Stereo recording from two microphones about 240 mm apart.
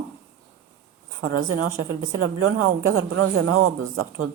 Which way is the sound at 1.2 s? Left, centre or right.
Right.